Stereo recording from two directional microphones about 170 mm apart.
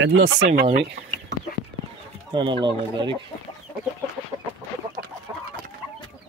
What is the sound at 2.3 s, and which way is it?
Speech, 30° right (ahead or behind).